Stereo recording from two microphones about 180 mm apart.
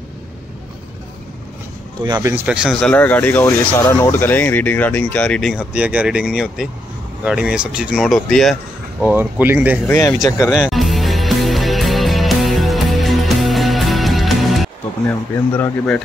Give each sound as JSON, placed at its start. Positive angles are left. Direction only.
{"t": 2.0, "sound": "speech", "side_deg": -20}
{"t": 2.4, "sound": "speech", "side_deg": -5}
{"t": 9.0, "sound": "speech", "side_deg": -10}
{"t": 9.8, "sound": "speech", "side_deg": 10}
{"t": 10.5, "sound": "music", "side_deg": 0}